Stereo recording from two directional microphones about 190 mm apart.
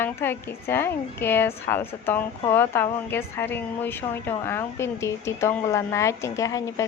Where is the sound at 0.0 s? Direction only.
10° left (ahead or behind).